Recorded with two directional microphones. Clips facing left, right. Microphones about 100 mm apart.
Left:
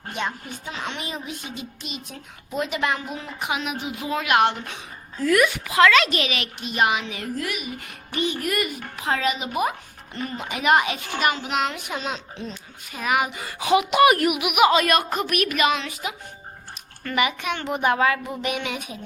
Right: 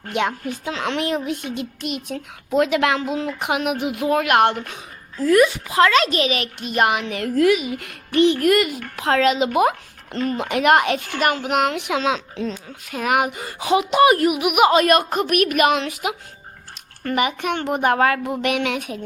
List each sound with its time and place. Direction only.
0.1 s a woman's voice: 80° right; by 2.2 s 65° right (ahead or behind)
2.6 s a woman's voice: 85° right; by 4.8 s 45° right (ahead or behind)
5.2 s a child's voice: 30° right (ahead or behind); by 7.9 s 85° right
8.2 s a woman's voice: 75° right (ahead or behind); by 12.2 s 90° right
12.9 s a woman's voice: 65° right (ahead or behind)
13.4 s speech: 35° right (ahead or behind)
14.4 s a child's voice: 45° right (ahead or behind); by 16.1 s 75° right (ahead or behind)
17.0 s a child's voice: 40° right (ahead or behind)
18.4 s a woman's voice: 75° right (ahead or behind)